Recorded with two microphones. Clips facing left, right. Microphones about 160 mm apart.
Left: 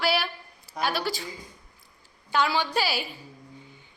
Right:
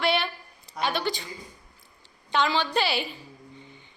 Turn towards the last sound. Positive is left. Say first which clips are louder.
# right 1 dB
turn(degrees=5)  # may be behind; listen again after turning